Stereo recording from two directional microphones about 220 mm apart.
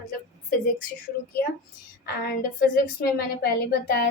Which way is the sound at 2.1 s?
45° left (ahead or behind).